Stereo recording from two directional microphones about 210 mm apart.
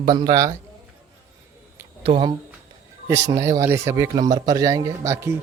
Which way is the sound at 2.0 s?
25° right (ahead or behind).